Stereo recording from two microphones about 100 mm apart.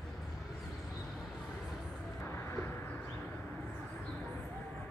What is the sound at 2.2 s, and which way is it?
Vehicle, 20° left (ahead or behind).